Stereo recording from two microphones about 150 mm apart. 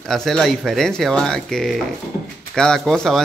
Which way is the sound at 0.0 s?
5° left (ahead or behind).